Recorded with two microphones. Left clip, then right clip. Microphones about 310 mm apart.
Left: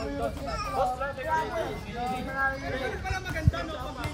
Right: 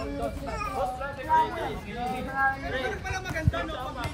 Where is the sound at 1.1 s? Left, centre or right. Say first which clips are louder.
Right 4 dB; centre.